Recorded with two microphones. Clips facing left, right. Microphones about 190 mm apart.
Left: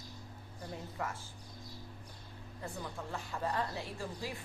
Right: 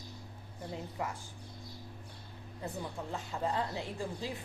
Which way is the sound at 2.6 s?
20° right (ahead or behind).